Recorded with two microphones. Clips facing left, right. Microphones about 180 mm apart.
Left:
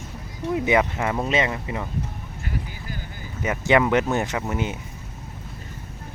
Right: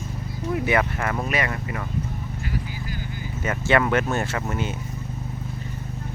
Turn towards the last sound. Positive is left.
turn(degrees=15)  # may be behind; listen again after turning